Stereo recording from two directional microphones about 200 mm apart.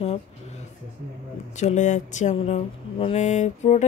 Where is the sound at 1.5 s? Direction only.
35° left (ahead or behind).